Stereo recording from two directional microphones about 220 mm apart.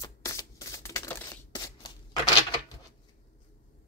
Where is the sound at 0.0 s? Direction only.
15° left (ahead or behind).